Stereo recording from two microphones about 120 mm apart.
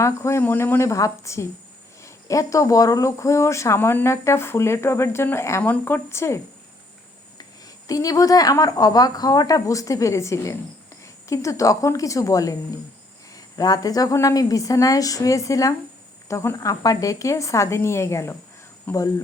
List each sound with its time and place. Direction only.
0.0 s speech: 25° left (ahead or behind)
7.9 s speech: 30° left (ahead or behind)